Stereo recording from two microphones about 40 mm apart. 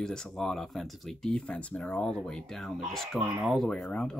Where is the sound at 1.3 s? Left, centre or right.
Left.